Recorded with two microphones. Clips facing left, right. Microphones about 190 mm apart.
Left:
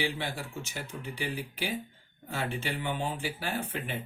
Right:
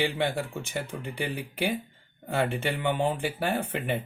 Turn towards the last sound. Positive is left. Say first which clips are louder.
# right 6 dB
turn(degrees=-60)  # may be behind; listen again after turning